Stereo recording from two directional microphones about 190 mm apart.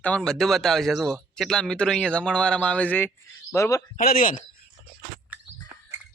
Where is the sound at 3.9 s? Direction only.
50° left (ahead or behind).